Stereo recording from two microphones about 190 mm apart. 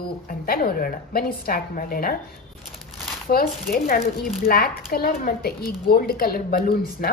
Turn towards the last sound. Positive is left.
turn(degrees=50)  # may be behind; listen again after turning